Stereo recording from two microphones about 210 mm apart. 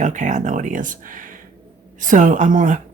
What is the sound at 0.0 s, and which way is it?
Speech, 35° right (ahead or behind).